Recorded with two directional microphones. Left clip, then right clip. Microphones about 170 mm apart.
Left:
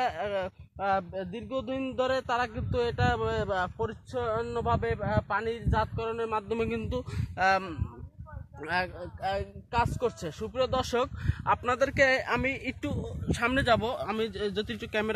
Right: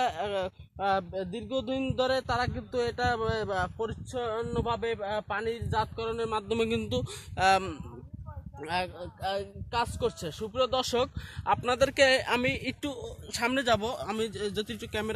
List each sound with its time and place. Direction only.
0.0 s speech: 55° right (ahead or behind)
1.3 s a sound: 75° right (ahead or behind)
1.8 s a man's voice: 45° right (ahead or behind)
2.4 s speech: 15° right (ahead or behind)
3.0 s speech: 30° right (ahead or behind)
3.5 s speech: 20° right (ahead or behind)
5.7 s speech: 35° right (ahead or behind)
6.3 s speech: 55° right (ahead or behind); by 7.6 s 70° right (ahead or behind)
8.5 s speech: 20° right (ahead or behind); by 11.8 s 35° right (ahead or behind)
11.9 s a man's voice: 55° right (ahead or behind)
12.4 s speech: 35° right (ahead or behind)
13.3 s speech: centre (ahead or behind); by 14.9 s 30° left (ahead or behind)
14.9 s speech: 40° left (ahead or behind)